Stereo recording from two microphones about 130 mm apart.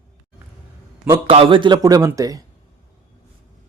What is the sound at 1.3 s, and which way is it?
Speech, 45° right (ahead or behind).